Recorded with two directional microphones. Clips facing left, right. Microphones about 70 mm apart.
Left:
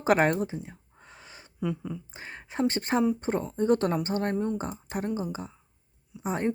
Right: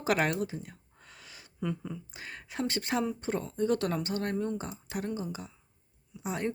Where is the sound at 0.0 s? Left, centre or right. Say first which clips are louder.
Left 5 dB; left.